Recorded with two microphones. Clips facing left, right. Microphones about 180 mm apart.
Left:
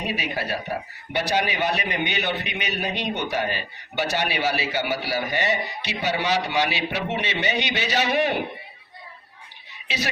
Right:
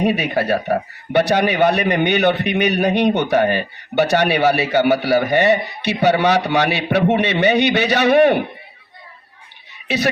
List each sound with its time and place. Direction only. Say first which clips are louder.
0.0 s a man's voice: right 10 dB; 55° right (ahead or behind)
9.8 s speech: right 10 dB; 55° right (ahead or behind)